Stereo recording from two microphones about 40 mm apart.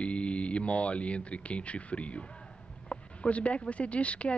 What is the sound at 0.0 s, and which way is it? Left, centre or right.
Speech, left.